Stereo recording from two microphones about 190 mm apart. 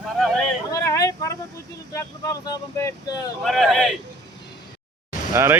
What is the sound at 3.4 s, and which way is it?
Speech, centre (ahead or behind).